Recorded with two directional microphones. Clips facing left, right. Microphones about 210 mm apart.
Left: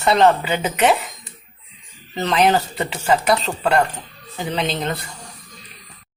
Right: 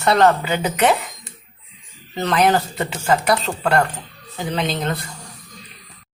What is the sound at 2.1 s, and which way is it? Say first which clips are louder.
Speech: even; 15° left (ahead or behind).